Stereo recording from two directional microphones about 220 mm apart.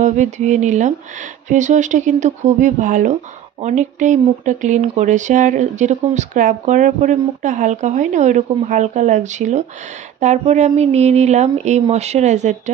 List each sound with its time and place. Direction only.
0.0 s speech: 35° right (ahead or behind)